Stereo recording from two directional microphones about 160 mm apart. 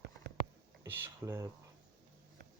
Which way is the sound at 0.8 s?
10° right (ahead or behind).